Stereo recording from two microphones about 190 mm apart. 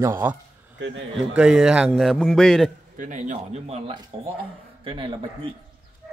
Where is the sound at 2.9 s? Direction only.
40° right (ahead or behind); by 5.5 s 25° right (ahead or behind).